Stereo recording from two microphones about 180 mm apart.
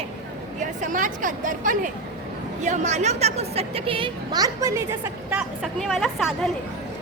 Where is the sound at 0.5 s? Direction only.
45° right (ahead or behind); by 5.7 s 10° right (ahead or behind).